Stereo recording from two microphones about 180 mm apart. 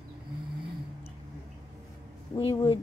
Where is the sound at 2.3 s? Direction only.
30° left (ahead or behind).